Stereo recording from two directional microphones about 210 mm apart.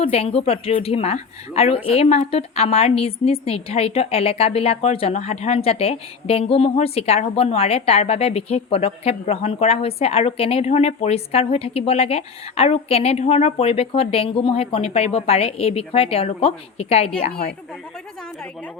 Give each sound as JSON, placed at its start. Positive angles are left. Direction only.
{"t": 0.0, "sound": "a woman's voice", "side_deg": 25}